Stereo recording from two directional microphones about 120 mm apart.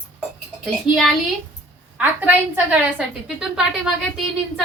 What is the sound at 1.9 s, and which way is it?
A woman's voice, 10° right (ahead or behind).